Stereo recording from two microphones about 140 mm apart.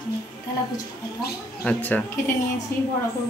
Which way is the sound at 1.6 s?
10° left (ahead or behind).